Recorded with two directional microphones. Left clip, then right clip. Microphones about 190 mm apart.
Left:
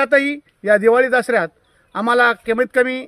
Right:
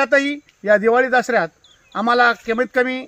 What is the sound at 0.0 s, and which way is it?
A man's voice, 15° left (ahead or behind).